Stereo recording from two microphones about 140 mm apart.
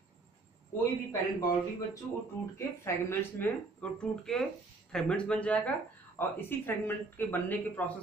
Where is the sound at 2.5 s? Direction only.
20° left (ahead or behind).